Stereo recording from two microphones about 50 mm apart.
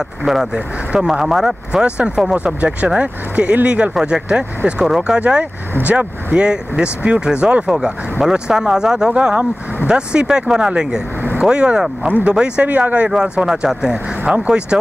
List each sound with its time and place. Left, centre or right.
0.9 s speech: centre
13.5 s speech: centre